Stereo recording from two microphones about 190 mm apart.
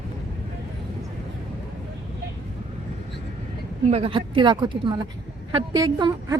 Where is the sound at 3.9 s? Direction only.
30° right (ahead or behind).